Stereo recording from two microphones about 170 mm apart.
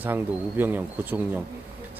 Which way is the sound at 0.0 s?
10° right (ahead or behind).